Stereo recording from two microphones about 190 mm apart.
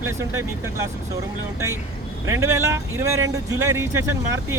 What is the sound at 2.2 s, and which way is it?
Speech, 15° right (ahead or behind).